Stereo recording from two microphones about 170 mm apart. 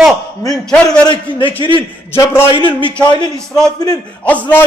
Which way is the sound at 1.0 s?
30° left (ahead or behind).